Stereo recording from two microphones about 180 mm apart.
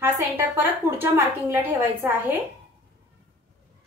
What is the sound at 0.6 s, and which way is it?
A woman's voice, 10° right (ahead or behind).